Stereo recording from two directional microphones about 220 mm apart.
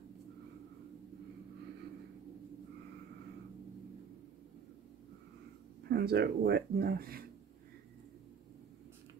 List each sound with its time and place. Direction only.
5.9 s speech: 45° right (ahead or behind)